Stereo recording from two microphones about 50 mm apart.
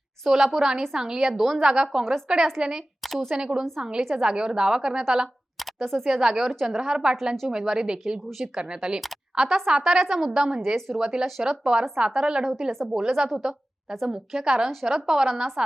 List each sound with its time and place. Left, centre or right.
0.3 s speech: centre
1.3 s speech: centre
1.6 s speech: centre
5.8 s speech: centre
10.8 s speech: centre
11.0 s speech: centre